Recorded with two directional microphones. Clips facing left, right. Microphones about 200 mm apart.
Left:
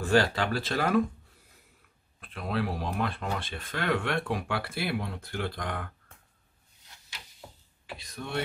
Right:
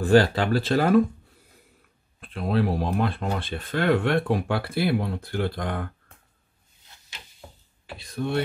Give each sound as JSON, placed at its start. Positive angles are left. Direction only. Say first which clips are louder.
{"t": 0.0, "sound": "speech", "louder": "right 6 dB", "side_deg": -30}
{"t": 2.1, "sound": "speech", "louder": "right 7 dB", "side_deg": -30}
{"t": 8.2, "sound": "speech", "louder": "right 11 dB", "side_deg": -40}